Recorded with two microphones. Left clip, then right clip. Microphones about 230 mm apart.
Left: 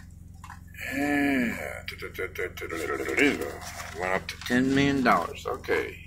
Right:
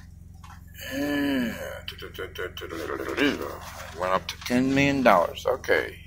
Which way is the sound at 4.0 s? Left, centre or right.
Centre.